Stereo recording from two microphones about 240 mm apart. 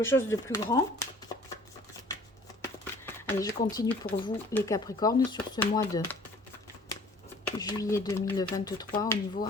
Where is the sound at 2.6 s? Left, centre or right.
Centre.